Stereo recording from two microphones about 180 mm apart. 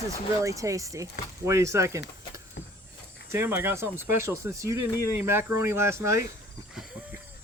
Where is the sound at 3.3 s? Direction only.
10° right (ahead or behind).